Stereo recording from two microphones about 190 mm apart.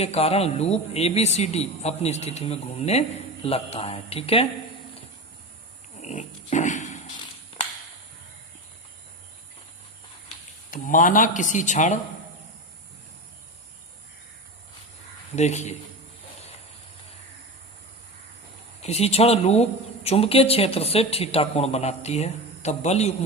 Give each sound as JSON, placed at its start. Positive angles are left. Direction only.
{"t": 0.0, "sound": "speech", "side_deg": 35}
{"t": 6.0, "sound": "pig", "side_deg": 40}
{"t": 10.7, "sound": "speech", "side_deg": 45}
{"t": 15.4, "sound": "speech", "side_deg": 35}
{"t": 18.8, "sound": "speech", "side_deg": 35}